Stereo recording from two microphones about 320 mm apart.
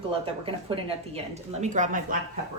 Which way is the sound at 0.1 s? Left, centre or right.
Centre.